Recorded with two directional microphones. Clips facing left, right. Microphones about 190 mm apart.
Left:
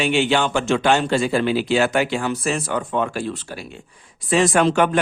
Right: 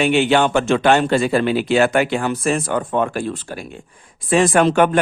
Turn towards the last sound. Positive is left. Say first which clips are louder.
# right 3 dB
turn(degrees=-55)  # may be behind; listen again after turning